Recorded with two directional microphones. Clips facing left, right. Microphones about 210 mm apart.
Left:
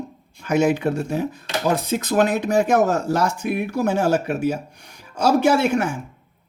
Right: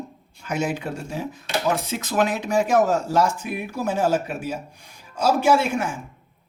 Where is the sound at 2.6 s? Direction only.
65° left (ahead or behind).